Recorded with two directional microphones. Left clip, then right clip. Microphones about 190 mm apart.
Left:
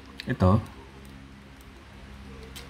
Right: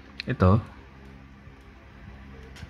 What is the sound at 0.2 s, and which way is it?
Speech, 15° right (ahead or behind).